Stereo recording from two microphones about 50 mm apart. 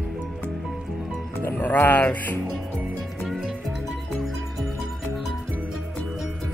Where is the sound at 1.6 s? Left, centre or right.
Left.